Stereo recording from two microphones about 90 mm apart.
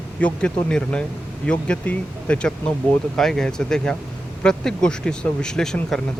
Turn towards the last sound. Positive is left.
turn(degrees=5)  # may be behind; listen again after turning